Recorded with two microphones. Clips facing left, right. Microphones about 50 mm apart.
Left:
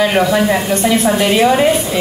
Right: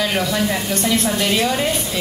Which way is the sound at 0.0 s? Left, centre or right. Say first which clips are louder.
Left 7 dB; centre.